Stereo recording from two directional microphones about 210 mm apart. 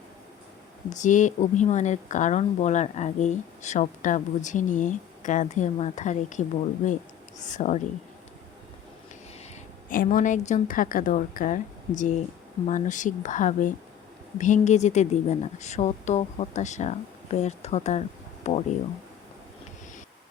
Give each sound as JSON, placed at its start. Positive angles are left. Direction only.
{"t": 0.9, "sound": "speech", "side_deg": 35}
{"t": 9.9, "sound": "speech", "side_deg": 40}